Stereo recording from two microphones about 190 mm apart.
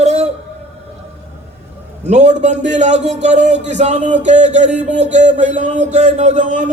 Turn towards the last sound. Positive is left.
turn(degrees=-40)  # may be behind; listen again after turning